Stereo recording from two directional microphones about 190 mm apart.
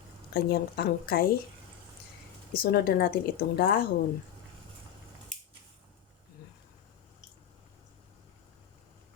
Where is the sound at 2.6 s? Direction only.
50° left (ahead or behind).